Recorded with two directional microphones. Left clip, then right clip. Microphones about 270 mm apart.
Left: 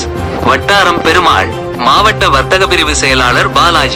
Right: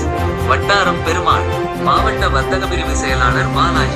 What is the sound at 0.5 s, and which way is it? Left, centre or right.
Music, left.